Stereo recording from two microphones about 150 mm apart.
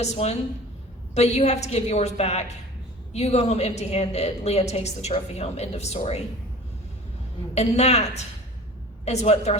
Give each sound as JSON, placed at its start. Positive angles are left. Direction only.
{"t": 0.0, "sound": "a woman's voice", "side_deg": 45}
{"t": 7.5, "sound": "a woman's voice", "side_deg": 45}